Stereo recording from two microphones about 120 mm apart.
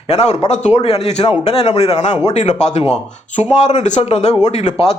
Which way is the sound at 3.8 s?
70° left (ahead or behind).